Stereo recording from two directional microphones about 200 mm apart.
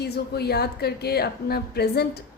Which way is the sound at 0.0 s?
55° left (ahead or behind).